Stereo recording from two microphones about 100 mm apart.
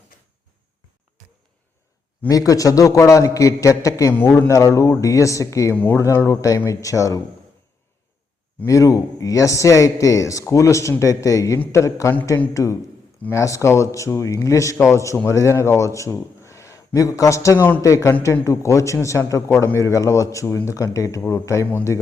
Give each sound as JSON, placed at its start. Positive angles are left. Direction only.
{"t": 2.3, "sound": "a man's voice", "side_deg": 35}
{"t": 5.7, "sound": "a man's voice", "side_deg": 20}
{"t": 6.0, "sound": "a man's voice", "side_deg": 30}
{"t": 8.6, "sound": "a man's voice", "side_deg": 35}